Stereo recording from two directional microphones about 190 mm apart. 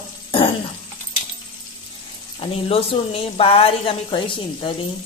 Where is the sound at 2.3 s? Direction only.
30° left (ahead or behind).